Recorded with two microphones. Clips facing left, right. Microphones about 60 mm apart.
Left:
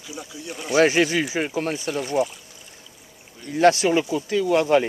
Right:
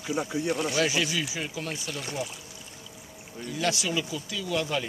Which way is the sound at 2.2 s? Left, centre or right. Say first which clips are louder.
Left 13 dB; left.